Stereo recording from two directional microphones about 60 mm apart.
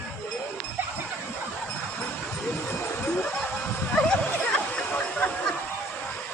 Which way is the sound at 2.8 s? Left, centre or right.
Left.